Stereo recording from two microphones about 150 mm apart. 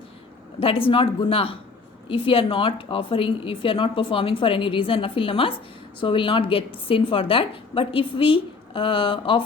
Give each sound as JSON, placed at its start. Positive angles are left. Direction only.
{"t": 0.6, "sound": "a woman's voice", "side_deg": 40}